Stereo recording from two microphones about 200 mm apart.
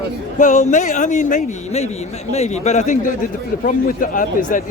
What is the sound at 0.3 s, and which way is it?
A man's voice, 35° left (ahead or behind).